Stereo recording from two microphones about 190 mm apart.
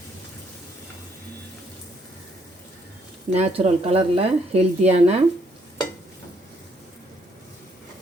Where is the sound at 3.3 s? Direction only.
35° right (ahead or behind).